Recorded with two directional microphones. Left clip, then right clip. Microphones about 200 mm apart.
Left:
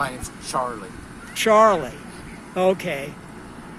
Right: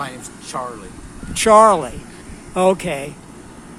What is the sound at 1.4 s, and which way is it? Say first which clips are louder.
Speech: right 5 dB; 30° right (ahead or behind).